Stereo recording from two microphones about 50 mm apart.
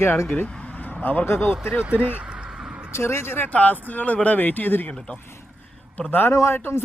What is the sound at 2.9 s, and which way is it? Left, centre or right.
Speech, left.